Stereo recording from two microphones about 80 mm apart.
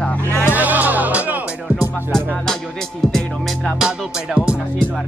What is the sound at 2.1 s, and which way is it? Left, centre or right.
Speech, centre.